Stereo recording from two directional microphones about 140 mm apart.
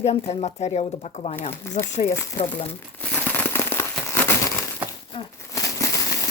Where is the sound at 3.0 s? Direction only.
15° left (ahead or behind).